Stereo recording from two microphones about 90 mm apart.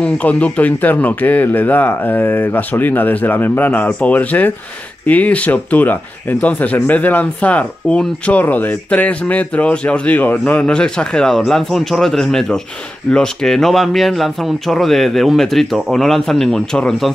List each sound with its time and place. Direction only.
0.0 s speech: 15° left (ahead or behind)